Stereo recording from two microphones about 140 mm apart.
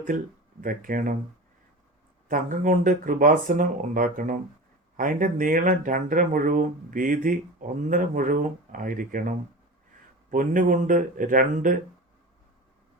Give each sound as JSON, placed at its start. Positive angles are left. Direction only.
{"t": 0.6, "sound": "speech", "side_deg": -80}
{"t": 2.2, "sound": "speech", "side_deg": -70}